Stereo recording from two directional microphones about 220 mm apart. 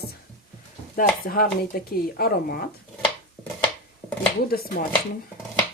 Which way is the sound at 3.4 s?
Centre (ahead or behind).